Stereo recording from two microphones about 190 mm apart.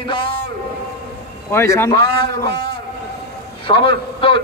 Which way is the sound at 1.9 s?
25° left (ahead or behind).